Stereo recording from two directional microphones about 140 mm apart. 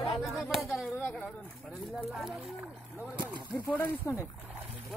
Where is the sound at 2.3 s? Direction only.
10° right (ahead or behind).